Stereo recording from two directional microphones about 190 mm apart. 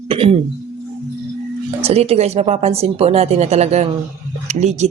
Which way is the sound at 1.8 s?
35° right (ahead or behind).